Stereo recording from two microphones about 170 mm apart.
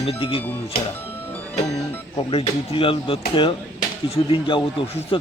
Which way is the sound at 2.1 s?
30° left (ahead or behind).